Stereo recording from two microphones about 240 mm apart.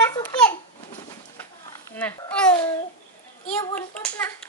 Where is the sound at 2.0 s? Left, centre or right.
Centre.